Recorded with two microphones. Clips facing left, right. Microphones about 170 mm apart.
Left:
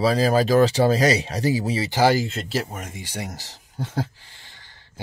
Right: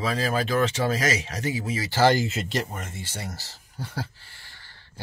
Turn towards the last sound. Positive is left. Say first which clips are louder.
# left 1 dB
turn(degrees=20)  # may be behind; listen again after turning